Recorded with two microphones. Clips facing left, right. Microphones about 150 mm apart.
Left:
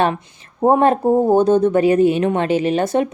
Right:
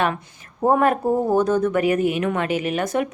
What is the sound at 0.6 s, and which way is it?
Speech, 25° left (ahead or behind).